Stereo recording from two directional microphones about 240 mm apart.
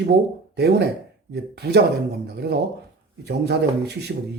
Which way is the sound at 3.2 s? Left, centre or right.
Right.